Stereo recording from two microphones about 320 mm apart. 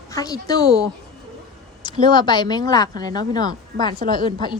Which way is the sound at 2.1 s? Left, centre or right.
Centre.